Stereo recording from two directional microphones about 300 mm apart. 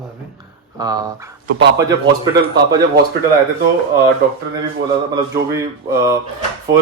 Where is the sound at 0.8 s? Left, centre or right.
Centre.